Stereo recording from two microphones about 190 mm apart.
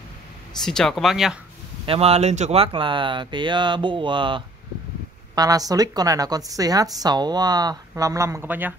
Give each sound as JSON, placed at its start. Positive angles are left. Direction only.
{"t": 0.7, "sound": "speech", "side_deg": 0}
{"t": 1.9, "sound": "a woman's voice", "side_deg": -30}